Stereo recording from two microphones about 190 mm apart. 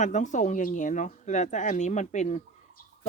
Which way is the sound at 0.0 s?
40° left (ahead or behind).